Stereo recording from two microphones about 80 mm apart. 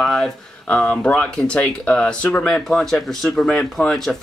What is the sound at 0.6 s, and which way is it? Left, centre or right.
Speech, centre.